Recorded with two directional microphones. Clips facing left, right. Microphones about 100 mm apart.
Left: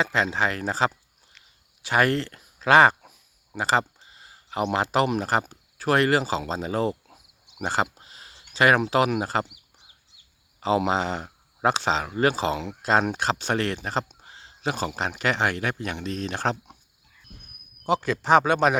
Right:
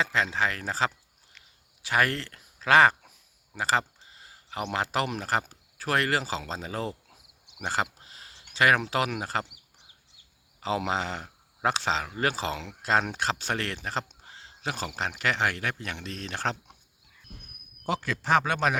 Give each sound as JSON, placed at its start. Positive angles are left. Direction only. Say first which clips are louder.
{"t": 0.0, "sound": "speech", "louder": "left 3 dB", "side_deg": 20}
{"t": 1.3, "sound": "a sound", "louder": "right 1 dB", "side_deg": 25}
{"t": 4.6, "sound": "speech", "louder": "left 6 dB", "side_deg": 25}
{"t": 10.6, "sound": "speech", "louder": "left 6 dB", "side_deg": 25}
{"t": 17.8, "sound": "speech", "louder": "left 6 dB", "side_deg": 20}